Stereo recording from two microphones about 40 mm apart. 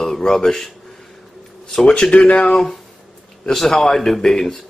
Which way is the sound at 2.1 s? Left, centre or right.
Left.